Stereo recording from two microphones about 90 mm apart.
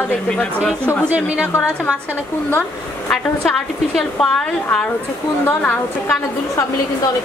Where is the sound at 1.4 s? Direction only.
30° left (ahead or behind).